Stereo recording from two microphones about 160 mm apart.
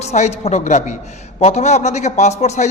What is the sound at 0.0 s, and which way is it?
A man's voice, 45° left (ahead or behind).